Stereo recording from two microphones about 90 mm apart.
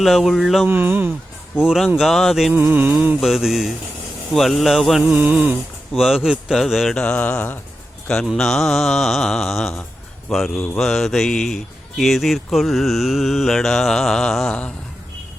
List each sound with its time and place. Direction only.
0.0 s speech: centre (ahead or behind)
0.7 s music: 25° right (ahead or behind)
1.5 s speech: 10° right (ahead or behind)
2.0 s speech: centre (ahead or behind)
2.5 s music: 20° right (ahead or behind)
3.2 s speech: centre (ahead or behind)
5.0 s music: 20° right (ahead or behind)
5.9 s speech: 5° right (ahead or behind)
6.9 s mantra: 10° left (ahead or behind)
8.0 s a man's voice: 5° left (ahead or behind)